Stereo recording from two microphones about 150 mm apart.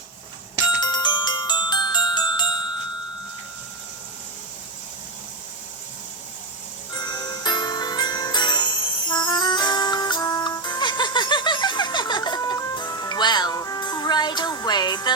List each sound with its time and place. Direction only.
0.8 s glockenspiel: 30° left (ahead or behind)
6.9 s music: 25° left (ahead or behind)